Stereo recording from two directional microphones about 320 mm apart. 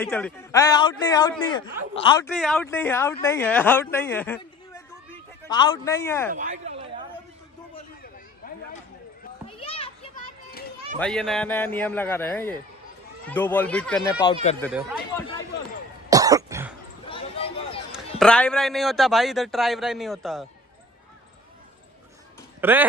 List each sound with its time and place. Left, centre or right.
0.0 s a man's voice: centre
2.2 s a man's voice: centre
4.4 s a sound: centre
6.3 s a sound: right
9.5 s children playing: centre
11.0 s a man's voice: centre
14.2 s speech: centre
14.6 s a man's voice: centre
15.1 s a sound: centre
16.1 s cough: centre
17.0 s a sound: centre
17.9 s a man's voice: centre
22.6 s speech: centre